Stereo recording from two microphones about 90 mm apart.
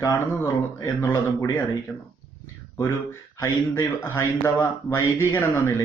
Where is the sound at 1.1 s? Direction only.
25° left (ahead or behind).